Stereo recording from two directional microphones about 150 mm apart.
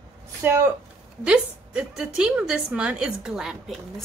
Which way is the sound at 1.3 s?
5° right (ahead or behind).